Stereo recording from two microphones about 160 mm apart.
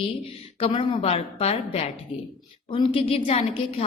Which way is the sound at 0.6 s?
35° left (ahead or behind).